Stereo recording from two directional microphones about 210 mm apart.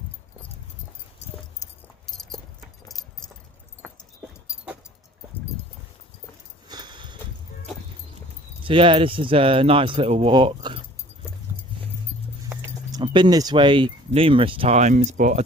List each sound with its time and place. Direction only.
3.8 s dog: 5° right (ahead or behind)
6.7 s a sound: 20° right (ahead or behind)
8.6 s speech: 25° right (ahead or behind)
12.9 s speech: 20° right (ahead or behind)